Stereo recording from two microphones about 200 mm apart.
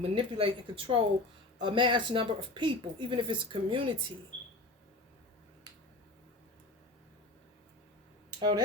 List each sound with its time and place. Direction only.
0.0 s a woman's voice: 30° right (ahead or behind)
8.4 s speech: 20° right (ahead or behind)